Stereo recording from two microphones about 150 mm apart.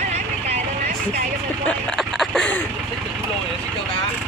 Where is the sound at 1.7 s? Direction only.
5° left (ahead or behind).